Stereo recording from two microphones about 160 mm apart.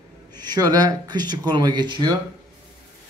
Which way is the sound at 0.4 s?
25° right (ahead or behind).